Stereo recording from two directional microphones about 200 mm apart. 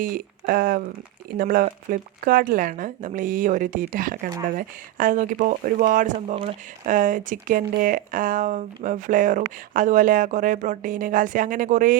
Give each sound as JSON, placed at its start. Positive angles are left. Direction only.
{"t": 0.0, "sound": "speech", "side_deg": -45}